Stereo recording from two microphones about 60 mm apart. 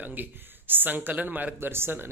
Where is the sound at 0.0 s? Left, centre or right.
Right.